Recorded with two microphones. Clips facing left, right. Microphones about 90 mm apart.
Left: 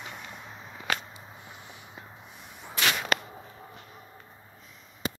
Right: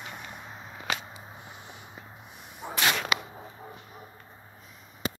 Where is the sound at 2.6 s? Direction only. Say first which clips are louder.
Right 7 dB; 20° right (ahead or behind).